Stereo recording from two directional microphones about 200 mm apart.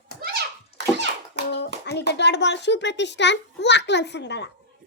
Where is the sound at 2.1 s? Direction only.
60° left (ahead or behind).